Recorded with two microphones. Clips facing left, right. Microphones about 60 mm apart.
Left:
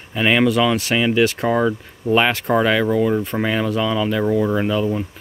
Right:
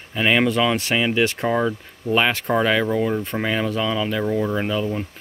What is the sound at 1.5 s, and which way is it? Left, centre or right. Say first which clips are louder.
Speech: left 3 dB; centre.